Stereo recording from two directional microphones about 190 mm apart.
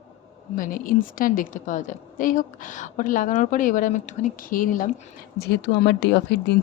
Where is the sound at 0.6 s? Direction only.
45° left (ahead or behind).